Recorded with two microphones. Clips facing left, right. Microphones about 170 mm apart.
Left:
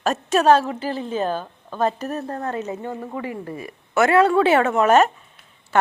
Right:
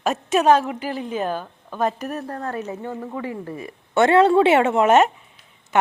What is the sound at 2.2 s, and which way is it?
Speech, 20° left (ahead or behind).